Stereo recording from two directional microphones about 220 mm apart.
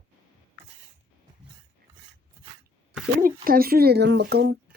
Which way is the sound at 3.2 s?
40° right (ahead or behind).